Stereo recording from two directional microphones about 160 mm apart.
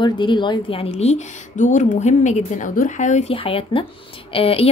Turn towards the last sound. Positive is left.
turn(degrees=35)  # may be behind; listen again after turning